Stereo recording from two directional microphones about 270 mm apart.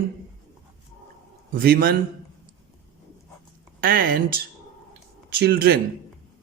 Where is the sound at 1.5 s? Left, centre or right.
Right.